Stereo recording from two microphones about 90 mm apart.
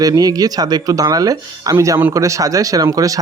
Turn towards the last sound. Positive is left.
turn(degrees=-40)  # may be behind; listen again after turning